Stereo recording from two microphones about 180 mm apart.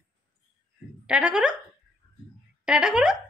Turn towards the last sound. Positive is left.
turn(degrees=-5)  # may be behind; listen again after turning